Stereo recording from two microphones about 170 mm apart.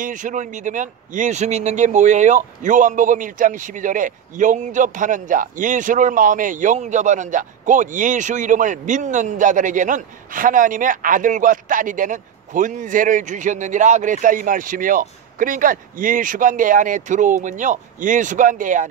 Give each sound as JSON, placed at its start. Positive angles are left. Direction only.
{"t": 0.0, "sound": "a man's voice", "side_deg": -50}